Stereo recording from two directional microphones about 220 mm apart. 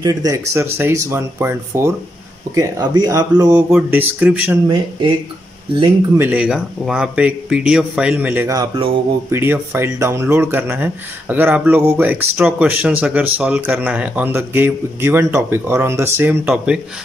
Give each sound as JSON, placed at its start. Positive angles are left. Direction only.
{"t": 0.0, "sound": "speech", "side_deg": -15}
{"t": 6.1, "sound": "speech", "side_deg": -5}